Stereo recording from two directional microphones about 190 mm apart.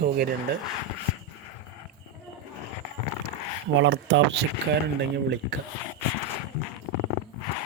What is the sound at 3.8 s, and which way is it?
Speech, 80° right.